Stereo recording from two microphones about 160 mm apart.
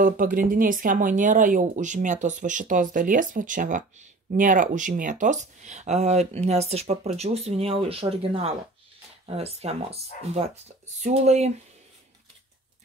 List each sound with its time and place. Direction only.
0.0 s speech: 60° right (ahead or behind); by 11.5 s 45° right (ahead or behind)